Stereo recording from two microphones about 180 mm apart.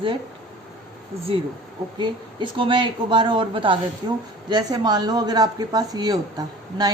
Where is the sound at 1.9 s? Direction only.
25° right (ahead or behind).